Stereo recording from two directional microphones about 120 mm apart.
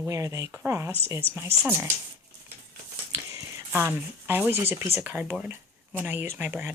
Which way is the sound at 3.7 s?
20° right (ahead or behind).